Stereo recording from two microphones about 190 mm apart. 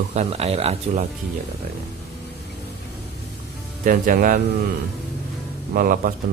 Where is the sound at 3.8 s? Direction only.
40° right (ahead or behind).